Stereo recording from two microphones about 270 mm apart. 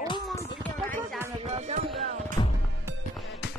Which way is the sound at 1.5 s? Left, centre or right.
Right.